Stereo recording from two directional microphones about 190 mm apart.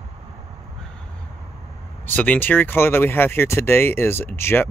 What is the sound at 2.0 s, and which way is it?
Speech, 10° left (ahead or behind).